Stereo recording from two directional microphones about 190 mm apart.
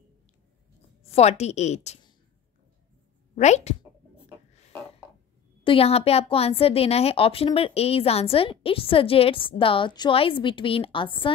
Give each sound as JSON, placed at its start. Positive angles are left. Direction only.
{"t": 1.1, "sound": "a woman's voice", "side_deg": 35}
{"t": 3.3, "sound": "a woman's voice", "side_deg": 35}
{"t": 5.6, "sound": "speech", "side_deg": 30}